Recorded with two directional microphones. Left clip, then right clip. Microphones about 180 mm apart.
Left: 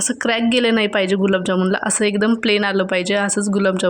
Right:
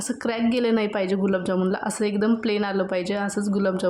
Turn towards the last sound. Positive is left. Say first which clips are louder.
# left 6 dB
turn(degrees=15)  # may be behind; listen again after turning